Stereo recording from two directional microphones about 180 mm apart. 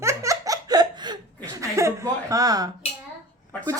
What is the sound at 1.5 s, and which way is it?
Speech, 15° right (ahead or behind).